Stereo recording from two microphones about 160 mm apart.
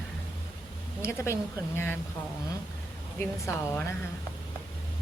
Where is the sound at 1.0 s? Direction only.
15° left (ahead or behind).